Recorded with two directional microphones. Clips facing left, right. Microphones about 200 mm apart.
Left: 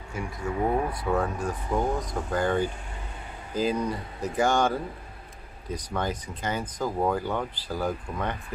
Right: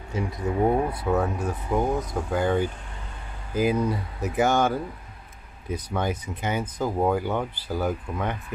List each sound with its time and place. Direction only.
0.1 s speech: 20° right (ahead or behind)
0.8 s speech: 10° right (ahead or behind)
5.7 s speech: 10° right (ahead or behind)